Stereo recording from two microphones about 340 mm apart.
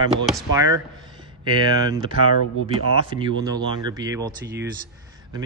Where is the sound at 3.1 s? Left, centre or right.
Centre.